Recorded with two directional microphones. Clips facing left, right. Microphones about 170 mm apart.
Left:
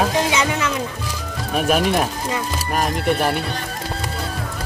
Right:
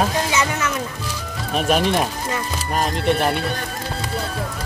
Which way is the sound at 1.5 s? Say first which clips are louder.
Even; 5° left (ahead or behind).